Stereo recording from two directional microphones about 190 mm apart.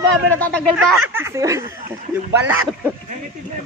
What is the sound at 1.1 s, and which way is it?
Speech, 15° right (ahead or behind).